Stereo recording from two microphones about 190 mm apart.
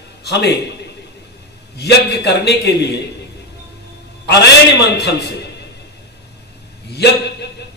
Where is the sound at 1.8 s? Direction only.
60° left (ahead or behind).